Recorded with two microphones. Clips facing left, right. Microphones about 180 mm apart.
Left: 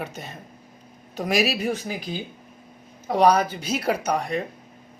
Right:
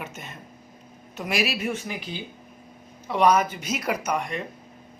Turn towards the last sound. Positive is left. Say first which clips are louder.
# left 3 dB
turn(degrees=35)  # may be behind; listen again after turning